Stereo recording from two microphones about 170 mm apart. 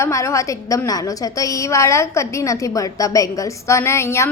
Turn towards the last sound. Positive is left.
turn(degrees=15)  # may be behind; listen again after turning